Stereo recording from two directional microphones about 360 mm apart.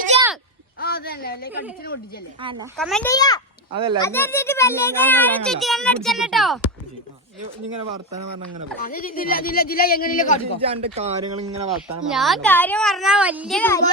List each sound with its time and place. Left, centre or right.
0.8 s a sound: left
2.4 s speech: centre
2.7 s speech: centre
3.7 s a child's voice: centre
4.0 s a child's voice: centre
7.8 s speech: right
8.8 s speech: left
10.7 s speech: centre
12.1 s a child's voice: centre